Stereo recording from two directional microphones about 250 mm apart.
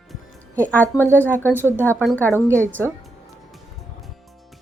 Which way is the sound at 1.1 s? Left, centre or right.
Centre.